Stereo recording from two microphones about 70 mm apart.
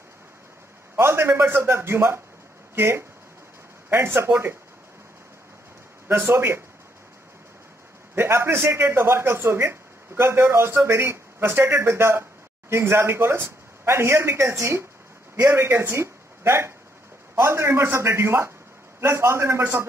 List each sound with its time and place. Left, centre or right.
0.9 s a man's voice: right
6.0 s a man's voice: right
8.1 s a man's voice: right